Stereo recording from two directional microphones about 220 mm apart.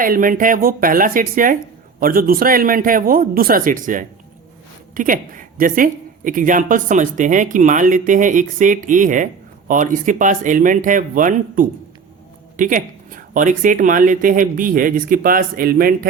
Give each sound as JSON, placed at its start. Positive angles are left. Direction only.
{"t": 0.0, "sound": "speech", "side_deg": -40}